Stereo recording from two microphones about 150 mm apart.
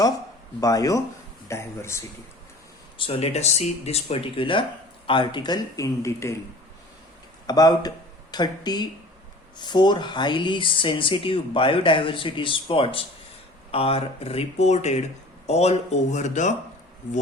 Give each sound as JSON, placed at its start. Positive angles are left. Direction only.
{"t": 0.6, "sound": "speech", "side_deg": 25}
{"t": 3.0, "sound": "speech", "side_deg": 40}
{"t": 7.4, "sound": "speech", "side_deg": 25}